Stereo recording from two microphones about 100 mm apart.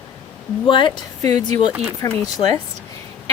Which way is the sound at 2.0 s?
35° left (ahead or behind).